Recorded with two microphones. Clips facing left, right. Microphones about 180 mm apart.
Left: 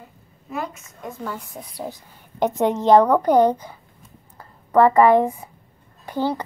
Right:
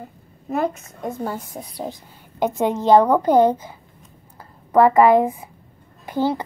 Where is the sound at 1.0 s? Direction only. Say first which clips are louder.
Right 5 dB; 40° right (ahead or behind).